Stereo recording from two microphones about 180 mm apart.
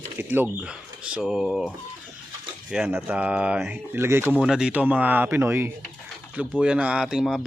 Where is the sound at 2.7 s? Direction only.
5° right (ahead or behind).